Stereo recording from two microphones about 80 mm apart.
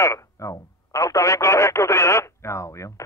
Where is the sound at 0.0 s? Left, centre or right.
Left.